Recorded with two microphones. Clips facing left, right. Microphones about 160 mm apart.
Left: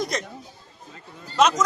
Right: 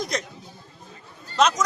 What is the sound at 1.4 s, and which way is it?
Speech, 5° left (ahead or behind).